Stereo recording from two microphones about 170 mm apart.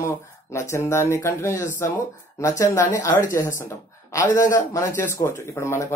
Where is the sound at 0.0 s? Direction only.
15° left (ahead or behind).